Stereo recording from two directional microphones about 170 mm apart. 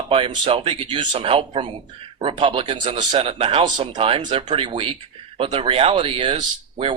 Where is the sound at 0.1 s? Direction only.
30° right (ahead or behind).